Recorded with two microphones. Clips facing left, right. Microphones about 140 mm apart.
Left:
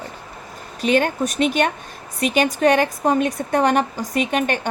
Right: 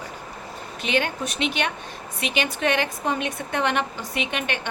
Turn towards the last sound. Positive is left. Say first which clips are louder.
# left 7 dB
turn(degrees=45)  # may be behind; listen again after turning